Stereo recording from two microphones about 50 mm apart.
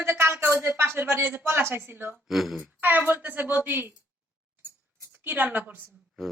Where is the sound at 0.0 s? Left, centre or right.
Right.